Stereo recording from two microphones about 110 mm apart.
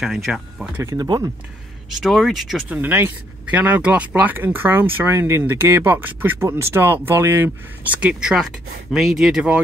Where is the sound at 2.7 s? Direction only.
20° right (ahead or behind).